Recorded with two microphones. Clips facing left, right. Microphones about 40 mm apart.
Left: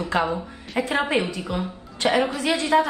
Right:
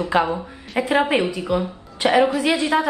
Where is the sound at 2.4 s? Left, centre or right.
Centre.